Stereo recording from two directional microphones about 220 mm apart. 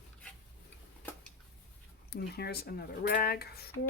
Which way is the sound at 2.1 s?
45° left (ahead or behind).